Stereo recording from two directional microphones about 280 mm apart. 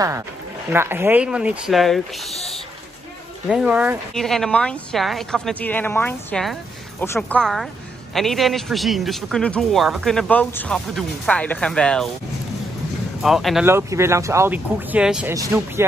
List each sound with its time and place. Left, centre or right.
0.7 s speech: centre
3.4 s speech: centre
13.2 s speech: centre